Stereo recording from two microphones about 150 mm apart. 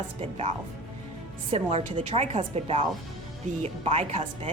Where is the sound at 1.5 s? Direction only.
40° right (ahead or behind).